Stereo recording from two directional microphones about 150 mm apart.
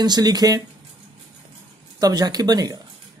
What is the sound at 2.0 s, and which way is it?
Speech, 25° right (ahead or behind).